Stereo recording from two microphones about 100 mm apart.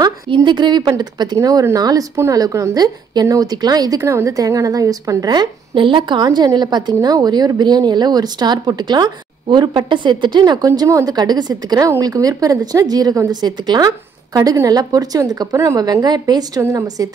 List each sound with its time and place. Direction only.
0.3 s a woman's voice: 50° right (ahead or behind)
4.0 s a woman's voice: 30° right (ahead or behind)
5.8 s a woman's voice: 55° right (ahead or behind); by 13.4 s 35° right (ahead or behind)
13.4 s a woman's voice: 45° right (ahead or behind)